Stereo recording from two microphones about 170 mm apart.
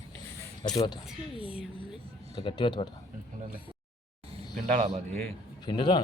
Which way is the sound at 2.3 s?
30° left (ahead or behind).